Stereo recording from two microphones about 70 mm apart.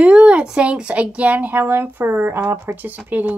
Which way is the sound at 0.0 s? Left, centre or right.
Centre.